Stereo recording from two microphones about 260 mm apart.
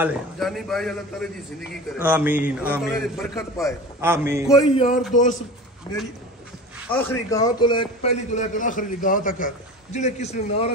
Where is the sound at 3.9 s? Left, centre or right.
Centre.